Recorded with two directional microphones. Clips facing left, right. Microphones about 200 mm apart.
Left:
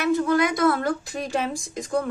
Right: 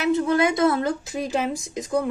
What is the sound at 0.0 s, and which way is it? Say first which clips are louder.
Speech: right 1 dB; 25° right (ahead or behind).